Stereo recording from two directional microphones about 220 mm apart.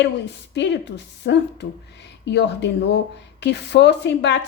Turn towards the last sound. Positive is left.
turn(degrees=50)  # may be behind; listen again after turning